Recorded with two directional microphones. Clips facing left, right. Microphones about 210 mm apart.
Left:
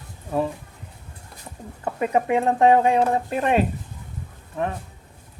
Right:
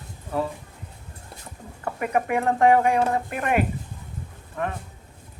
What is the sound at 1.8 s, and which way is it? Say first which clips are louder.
Speech: left 3 dB; 25° left (ahead or behind).